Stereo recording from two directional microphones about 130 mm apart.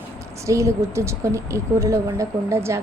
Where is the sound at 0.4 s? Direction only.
25° right (ahead or behind).